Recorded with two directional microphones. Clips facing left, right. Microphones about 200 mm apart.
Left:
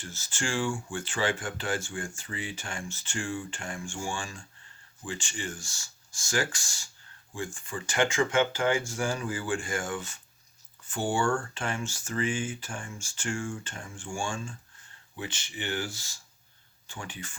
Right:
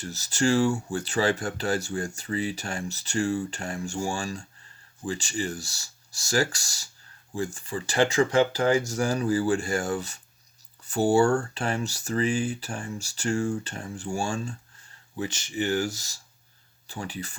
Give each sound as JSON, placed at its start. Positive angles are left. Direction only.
{"t": 0.0, "sound": "speech", "side_deg": -40}